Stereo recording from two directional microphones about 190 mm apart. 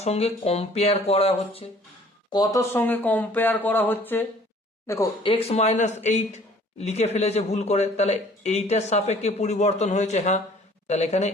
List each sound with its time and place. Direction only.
0.0 s speech: 35° left (ahead or behind)
2.3 s speech: 20° left (ahead or behind)
5.3 s speech: 30° left (ahead or behind)